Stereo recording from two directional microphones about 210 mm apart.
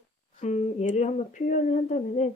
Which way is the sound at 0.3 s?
30° left (ahead or behind).